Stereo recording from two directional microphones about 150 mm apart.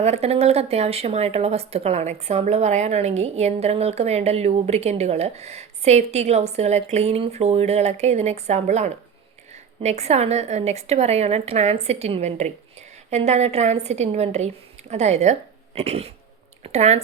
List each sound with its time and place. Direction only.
0.0 s speech: 45° right (ahead or behind)